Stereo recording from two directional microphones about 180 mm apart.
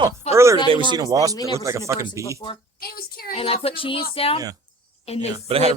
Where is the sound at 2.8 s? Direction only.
55° left (ahead or behind).